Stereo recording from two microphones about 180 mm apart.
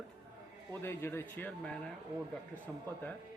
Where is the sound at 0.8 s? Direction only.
10° left (ahead or behind).